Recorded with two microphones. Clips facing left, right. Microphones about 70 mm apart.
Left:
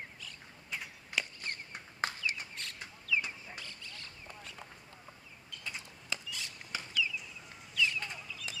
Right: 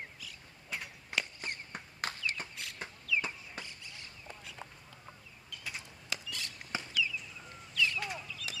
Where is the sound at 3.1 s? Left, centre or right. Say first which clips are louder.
Right 1 dB; right.